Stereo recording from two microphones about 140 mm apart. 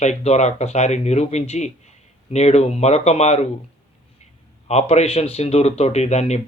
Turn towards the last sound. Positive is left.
turn(degrees=55)  # may be behind; listen again after turning